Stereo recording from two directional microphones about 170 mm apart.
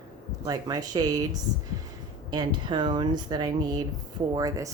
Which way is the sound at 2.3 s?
25° right (ahead or behind).